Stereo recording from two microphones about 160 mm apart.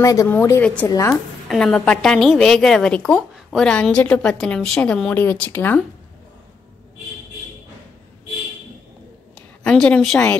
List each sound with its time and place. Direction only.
0.0 s a woman's voice: 20° left (ahead or behind)
1.5 s a woman's voice: 5° left (ahead or behind)
9.6 s a woman's voice: 5° left (ahead or behind)